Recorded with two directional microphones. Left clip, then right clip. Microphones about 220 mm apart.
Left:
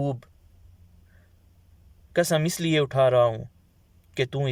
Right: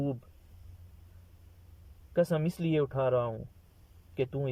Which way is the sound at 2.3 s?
20° left (ahead or behind).